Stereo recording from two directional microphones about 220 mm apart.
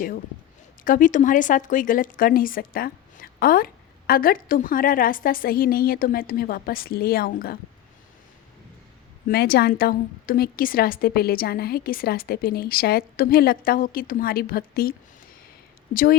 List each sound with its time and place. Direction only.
0.9 s speech: 35° left (ahead or behind)
9.2 s a woman's voice: 45° left (ahead or behind)